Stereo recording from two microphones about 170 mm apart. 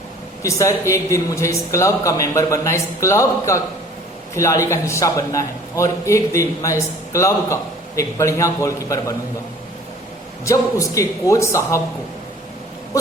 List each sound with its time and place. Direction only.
0.4 s a man's voice: 15° left (ahead or behind)
10.4 s a man's voice: 20° left (ahead or behind)